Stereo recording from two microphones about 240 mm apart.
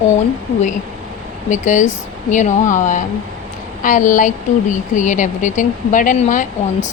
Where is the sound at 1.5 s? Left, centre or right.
Left.